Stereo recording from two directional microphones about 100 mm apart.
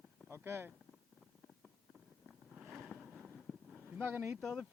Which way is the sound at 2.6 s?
Centre (ahead or behind).